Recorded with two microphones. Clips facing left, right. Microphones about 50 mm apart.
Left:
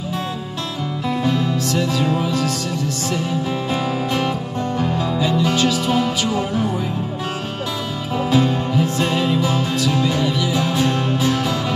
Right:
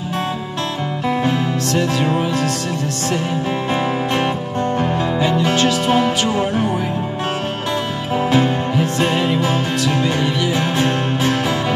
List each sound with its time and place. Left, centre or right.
1.2 s music: right
4.7 s music: right
8.3 s music: right